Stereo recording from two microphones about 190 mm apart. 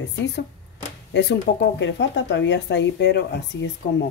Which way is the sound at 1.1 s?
65° left (ahead or behind).